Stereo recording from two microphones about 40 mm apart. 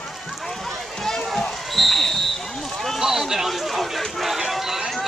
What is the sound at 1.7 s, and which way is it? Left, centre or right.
Speech, centre.